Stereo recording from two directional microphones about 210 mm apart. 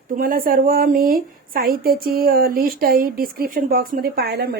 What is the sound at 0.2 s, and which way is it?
A woman's voice, 40° right (ahead or behind).